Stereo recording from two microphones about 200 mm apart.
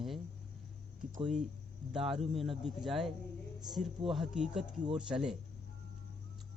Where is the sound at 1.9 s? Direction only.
Centre (ahead or behind).